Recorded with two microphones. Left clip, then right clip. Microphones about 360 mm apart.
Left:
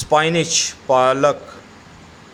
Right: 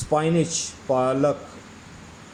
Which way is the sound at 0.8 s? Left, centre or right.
Left.